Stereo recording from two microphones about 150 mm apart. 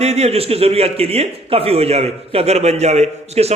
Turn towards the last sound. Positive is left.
turn(degrees=-45)  # may be behind; listen again after turning